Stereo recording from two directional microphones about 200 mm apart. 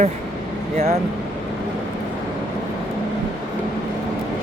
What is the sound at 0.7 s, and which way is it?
Speech, 30° right (ahead or behind).